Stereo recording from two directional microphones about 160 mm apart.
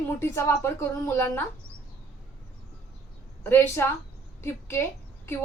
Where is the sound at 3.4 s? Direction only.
15° left (ahead or behind).